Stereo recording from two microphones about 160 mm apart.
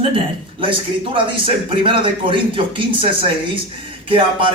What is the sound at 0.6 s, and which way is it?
Speech, 35° right (ahead or behind).